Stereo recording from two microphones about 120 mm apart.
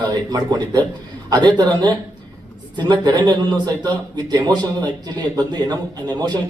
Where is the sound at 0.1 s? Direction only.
35° right (ahead or behind).